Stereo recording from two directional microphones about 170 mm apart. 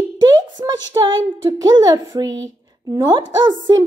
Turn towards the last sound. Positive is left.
turn(degrees=-25)  # may be behind; listen again after turning